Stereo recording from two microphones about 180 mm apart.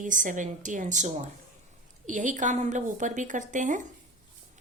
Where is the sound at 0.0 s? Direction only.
45° right (ahead or behind).